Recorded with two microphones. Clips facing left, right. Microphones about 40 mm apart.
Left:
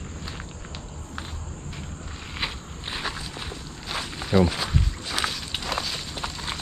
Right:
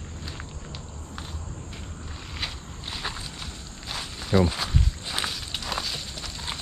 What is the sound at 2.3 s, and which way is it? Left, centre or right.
Walk, centre.